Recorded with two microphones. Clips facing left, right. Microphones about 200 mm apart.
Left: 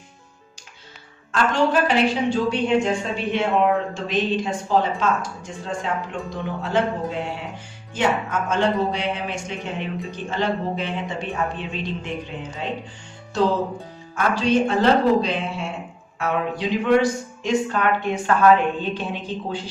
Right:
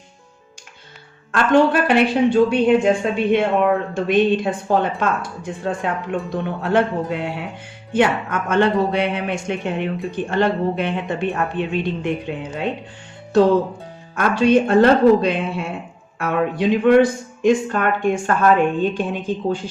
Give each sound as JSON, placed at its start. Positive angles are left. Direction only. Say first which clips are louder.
{"t": 1.3, "sound": "speech", "louder": "right 5 dB", "side_deg": -60}
{"t": 14.2, "sound": "speech", "louder": "right 4 dB", "side_deg": -55}